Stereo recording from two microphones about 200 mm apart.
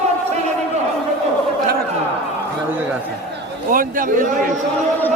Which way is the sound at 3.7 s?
45° right (ahead or behind).